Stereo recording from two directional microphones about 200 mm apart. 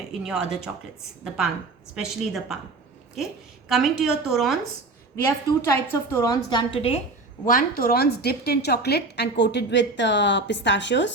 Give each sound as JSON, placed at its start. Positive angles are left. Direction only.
{"t": 0.3, "sound": "a woman's voice", "side_deg": -5}
{"t": 2.0, "sound": "a woman's voice", "side_deg": 0}
{"t": 3.7, "sound": "a woman's voice", "side_deg": 0}
{"t": 5.2, "sound": "a woman's voice", "side_deg": 10}
{"t": 7.4, "sound": "a woman's voice", "side_deg": 45}